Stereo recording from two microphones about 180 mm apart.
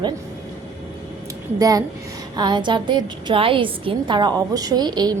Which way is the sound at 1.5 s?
20° right (ahead or behind).